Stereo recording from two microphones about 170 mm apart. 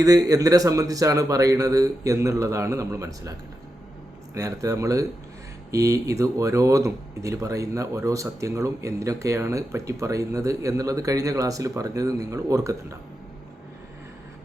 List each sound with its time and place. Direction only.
0.0 s speech: 20° right (ahead or behind)
4.4 s speech: 20° right (ahead or behind)